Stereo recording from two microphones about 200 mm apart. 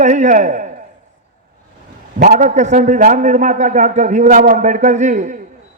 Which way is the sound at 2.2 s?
40° right (ahead or behind).